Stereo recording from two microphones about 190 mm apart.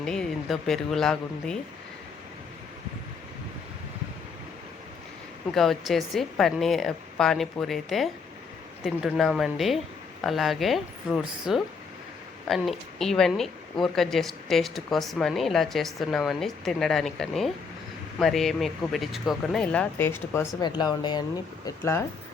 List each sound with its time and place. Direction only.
0.0 s speech: 5° left (ahead or behind)
5.5 s speech: centre (ahead or behind); by 22.0 s 15° left (ahead or behind)